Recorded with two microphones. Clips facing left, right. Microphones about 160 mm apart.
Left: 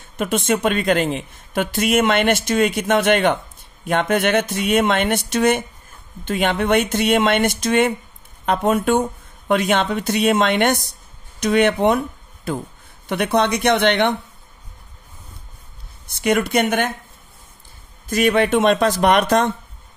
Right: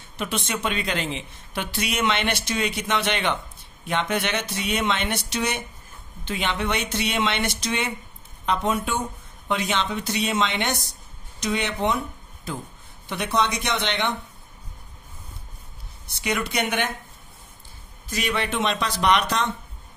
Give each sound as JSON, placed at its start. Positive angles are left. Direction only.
{"t": 0.2, "sound": "a man's voice", "side_deg": 50}
{"t": 13.1, "sound": "speech", "side_deg": 55}
{"t": 16.2, "sound": "a man's voice", "side_deg": 50}
{"t": 18.1, "sound": "a man's voice", "side_deg": 50}